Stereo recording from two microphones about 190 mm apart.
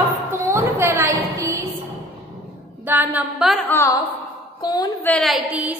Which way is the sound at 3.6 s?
10° left (ahead or behind).